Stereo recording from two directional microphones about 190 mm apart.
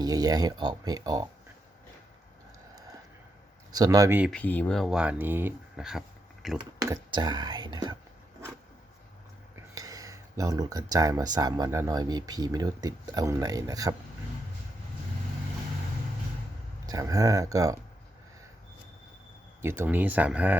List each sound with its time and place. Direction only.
0.0 s speech: 20° right (ahead or behind)
3.7 s speech: 20° right (ahead or behind)
4.3 s speech: 5° left (ahead or behind)
6.6 s speech: 15° right (ahead or behind)
9.7 s speech: 20° right (ahead or behind)
16.8 s speech: 20° right (ahead or behind)
19.6 s speech: 10° right (ahead or behind)